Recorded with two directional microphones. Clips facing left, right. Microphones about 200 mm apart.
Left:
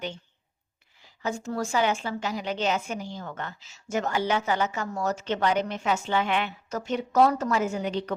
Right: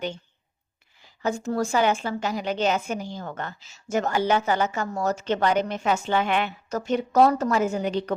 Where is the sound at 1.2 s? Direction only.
45° right (ahead or behind).